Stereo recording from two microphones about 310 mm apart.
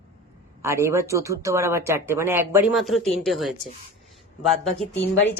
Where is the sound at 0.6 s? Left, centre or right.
Centre.